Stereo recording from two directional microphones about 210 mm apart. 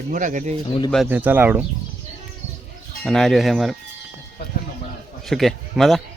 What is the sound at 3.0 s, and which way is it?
Speech, centre (ahead or behind).